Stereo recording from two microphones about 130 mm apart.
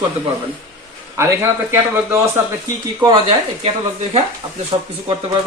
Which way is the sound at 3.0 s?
30° right (ahead or behind).